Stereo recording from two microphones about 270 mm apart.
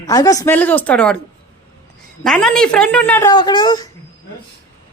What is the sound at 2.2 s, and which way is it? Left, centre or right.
A woman's voice, centre.